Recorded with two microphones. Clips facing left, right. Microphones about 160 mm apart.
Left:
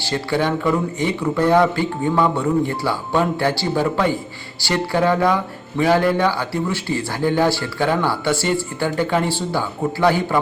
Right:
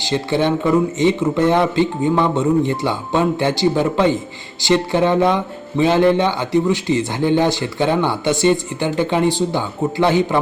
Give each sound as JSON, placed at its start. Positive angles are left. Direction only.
{"t": 0.0, "sound": "speech", "side_deg": -20}